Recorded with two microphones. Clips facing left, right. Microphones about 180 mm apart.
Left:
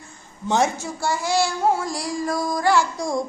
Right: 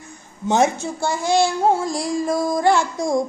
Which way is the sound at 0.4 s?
20° right (ahead or behind).